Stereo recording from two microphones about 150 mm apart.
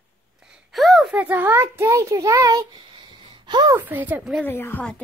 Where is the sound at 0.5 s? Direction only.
Centre (ahead or behind); by 3.7 s 30° right (ahead or behind).